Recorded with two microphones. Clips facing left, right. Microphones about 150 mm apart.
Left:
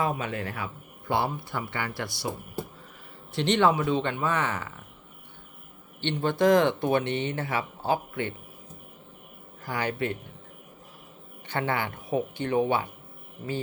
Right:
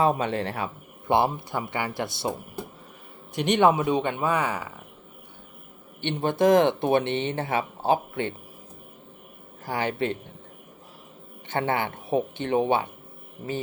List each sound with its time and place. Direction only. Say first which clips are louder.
0.0 s speech: right 6 dB; 30° right (ahead or behind)
3.3 s speech: right 2 dB; 15° right (ahead or behind)
6.0 s speech: right 2 dB; 15° right (ahead or behind)
9.6 s speech: right 2 dB; 20° right (ahead or behind)
11.4 s speech: right 3 dB; 20° right (ahead or behind)